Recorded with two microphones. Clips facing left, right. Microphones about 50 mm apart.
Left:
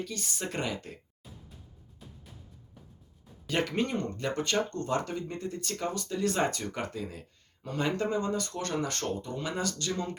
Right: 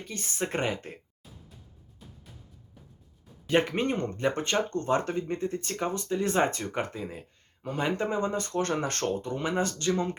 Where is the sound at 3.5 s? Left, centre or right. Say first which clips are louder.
Right 4 dB; right.